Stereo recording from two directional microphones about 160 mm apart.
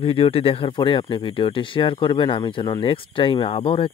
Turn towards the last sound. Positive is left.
turn(degrees=35)  # may be behind; listen again after turning